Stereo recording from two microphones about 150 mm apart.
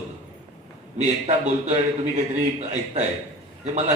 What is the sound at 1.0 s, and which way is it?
A man's voice, 50° right (ahead or behind).